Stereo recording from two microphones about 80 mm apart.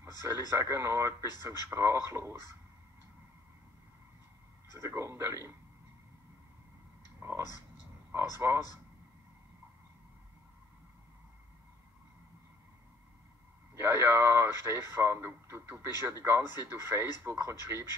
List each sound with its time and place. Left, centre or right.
0.0 s a sound: right
0.5 s a man's voice: right
4.7 s a man's voice: right
7.2 s a man's voice: right
13.7 s a man's voice: right